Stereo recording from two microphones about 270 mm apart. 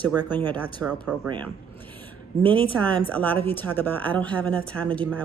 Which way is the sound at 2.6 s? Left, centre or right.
Centre.